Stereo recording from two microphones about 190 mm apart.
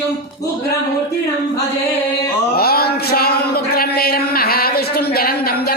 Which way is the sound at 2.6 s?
55° left (ahead or behind).